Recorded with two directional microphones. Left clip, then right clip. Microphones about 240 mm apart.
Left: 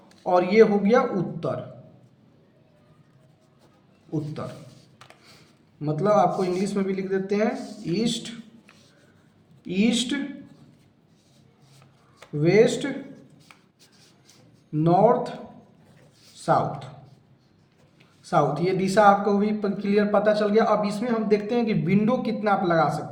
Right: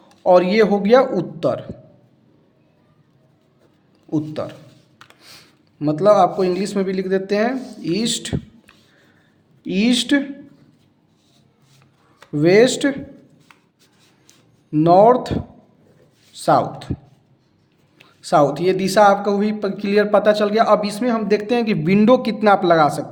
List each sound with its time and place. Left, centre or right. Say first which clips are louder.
0.3 s a man's voice: right 5 dB; right
4.4 s a man's voice: right 8 dB; right
5.8 s a man's voice: right 7 dB; right
9.6 s a man's voice: right 6 dB; right
12.4 s a man's voice: right 6 dB; right
14.7 s a man's voice: right 8 dB; right
16.4 s a man's voice: right 6 dB; right
18.2 s a man's voice: right 7 dB; right